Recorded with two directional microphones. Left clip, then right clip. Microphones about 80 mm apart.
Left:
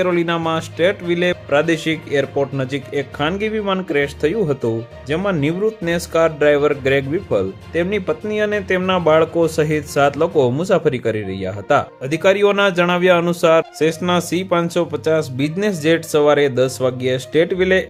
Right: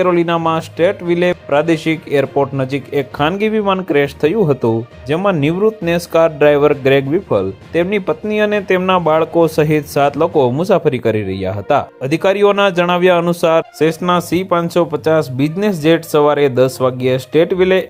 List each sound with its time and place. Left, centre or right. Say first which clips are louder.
0.0 s speech: right 4 dB; right